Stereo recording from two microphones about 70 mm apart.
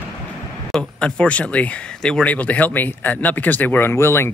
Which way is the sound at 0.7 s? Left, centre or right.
Centre.